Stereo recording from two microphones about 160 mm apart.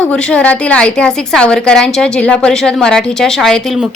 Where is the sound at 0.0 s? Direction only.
10° left (ahead or behind).